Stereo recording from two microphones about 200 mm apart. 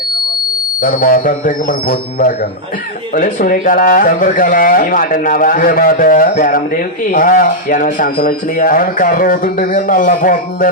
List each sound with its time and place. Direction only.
0.8 s speech: 45° left (ahead or behind)